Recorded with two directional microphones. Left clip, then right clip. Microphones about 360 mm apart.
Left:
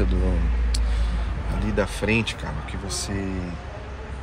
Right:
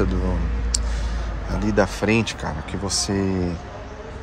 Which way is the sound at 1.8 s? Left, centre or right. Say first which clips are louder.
Right 4 dB; centre.